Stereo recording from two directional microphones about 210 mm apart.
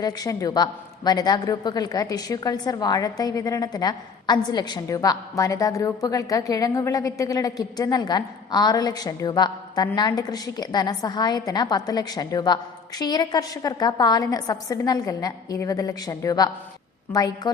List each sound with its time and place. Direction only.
0.0 s a man's voice: 15° left (ahead or behind)